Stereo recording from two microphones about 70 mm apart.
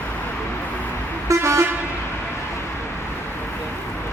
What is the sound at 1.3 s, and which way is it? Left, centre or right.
Vehicle, right.